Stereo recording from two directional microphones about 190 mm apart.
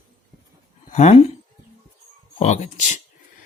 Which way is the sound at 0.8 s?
35° left (ahead or behind).